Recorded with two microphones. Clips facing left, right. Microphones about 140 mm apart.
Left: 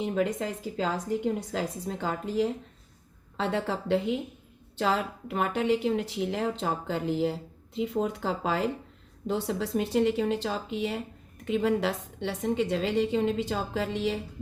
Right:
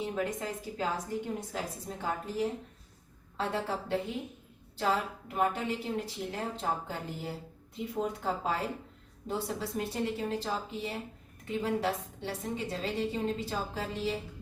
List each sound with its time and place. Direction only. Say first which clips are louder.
0.0 s a woman's voice: left 5 dB; 90° left